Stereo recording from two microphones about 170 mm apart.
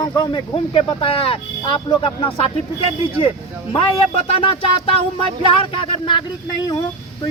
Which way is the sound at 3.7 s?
35° left (ahead or behind).